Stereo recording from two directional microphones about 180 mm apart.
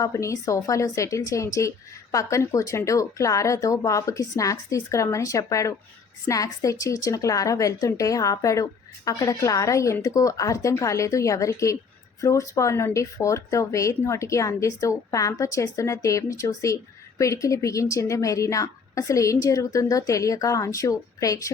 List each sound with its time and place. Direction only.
0.0 s speech: 15° left (ahead or behind)